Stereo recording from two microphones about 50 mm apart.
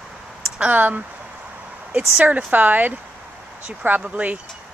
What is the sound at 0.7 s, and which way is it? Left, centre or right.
Speech, right.